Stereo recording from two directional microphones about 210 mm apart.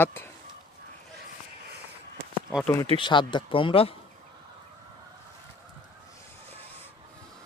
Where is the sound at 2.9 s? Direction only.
20° left (ahead or behind).